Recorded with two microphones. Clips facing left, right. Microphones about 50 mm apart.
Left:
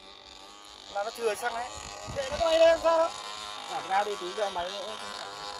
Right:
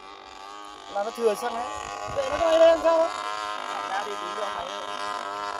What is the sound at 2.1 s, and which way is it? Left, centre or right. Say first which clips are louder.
Speech: right 4 dB; right.